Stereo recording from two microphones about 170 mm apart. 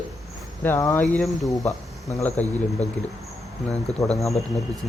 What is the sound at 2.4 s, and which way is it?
Speech, 10° left (ahead or behind).